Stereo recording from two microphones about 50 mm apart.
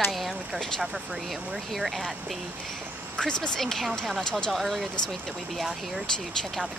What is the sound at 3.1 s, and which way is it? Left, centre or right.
Speech, centre.